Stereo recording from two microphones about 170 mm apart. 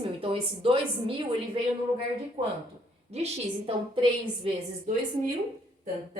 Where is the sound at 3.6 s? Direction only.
30° right (ahead or behind).